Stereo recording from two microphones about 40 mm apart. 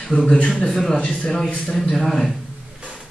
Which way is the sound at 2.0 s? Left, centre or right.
Centre.